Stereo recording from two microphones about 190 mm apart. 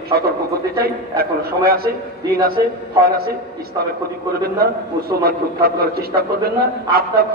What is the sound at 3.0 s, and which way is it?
Speech, 55° right (ahead or behind).